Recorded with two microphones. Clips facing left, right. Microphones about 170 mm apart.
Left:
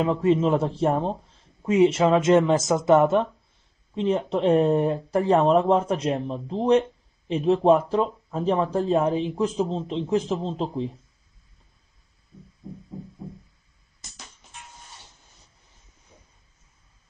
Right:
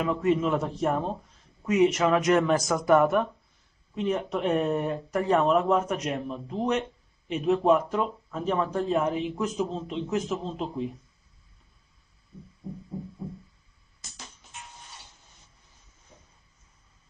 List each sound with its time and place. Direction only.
0.0 s speech: 30° left (ahead or behind)